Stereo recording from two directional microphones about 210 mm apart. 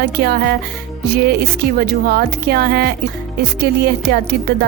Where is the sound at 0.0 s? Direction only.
50° right (ahead or behind).